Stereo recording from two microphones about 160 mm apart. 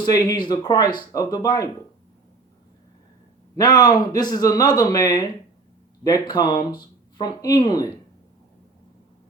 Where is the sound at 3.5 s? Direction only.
25° left (ahead or behind).